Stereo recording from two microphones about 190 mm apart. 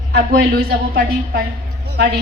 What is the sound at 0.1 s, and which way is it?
A woman's voice, 50° right (ahead or behind).